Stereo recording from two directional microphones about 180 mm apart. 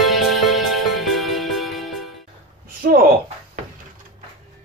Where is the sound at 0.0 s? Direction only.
Centre (ahead or behind).